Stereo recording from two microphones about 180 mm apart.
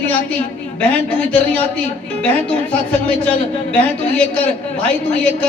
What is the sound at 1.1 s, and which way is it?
A man's voice, 5° left (ahead or behind).